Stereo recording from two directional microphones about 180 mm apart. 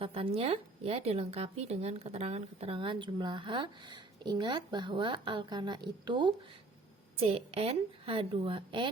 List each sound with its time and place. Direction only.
0.0 s a woman's voice: 30° right (ahead or behind)